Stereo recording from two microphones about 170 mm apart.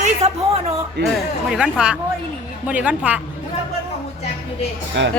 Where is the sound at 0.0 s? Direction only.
40° right (ahead or behind).